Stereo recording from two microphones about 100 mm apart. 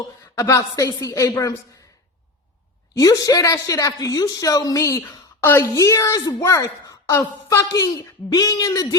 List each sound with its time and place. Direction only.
0.4 s a woman's voice: 40° left (ahead or behind)
3.0 s a woman's voice: 35° left (ahead or behind)
5.4 s a woman's voice: 20° left (ahead or behind)
5.7 s a woman's voice: 35° left (ahead or behind)